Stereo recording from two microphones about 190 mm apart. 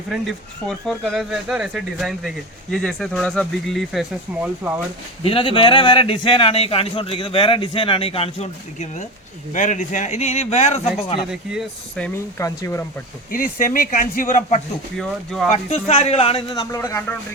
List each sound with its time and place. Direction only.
0.1 s speech: centre (ahead or behind)
4.4 s speech: 10° right (ahead or behind)
5.2 s a man's voice: 25° left (ahead or behind)
11.3 s speech: centre (ahead or behind)
12.5 s a man's voice: 15° left (ahead or behind)
13.3 s speech: 45° left (ahead or behind)
14.9 s speech: centre (ahead or behind)
15.5 s a man's voice: 30° left (ahead or behind)
16.6 s a man's voice: 15° left (ahead or behind)